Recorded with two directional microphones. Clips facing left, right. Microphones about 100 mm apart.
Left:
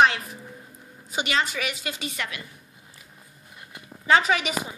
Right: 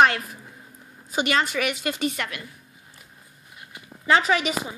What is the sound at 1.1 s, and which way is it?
A woman's voice, 45° right (ahead or behind).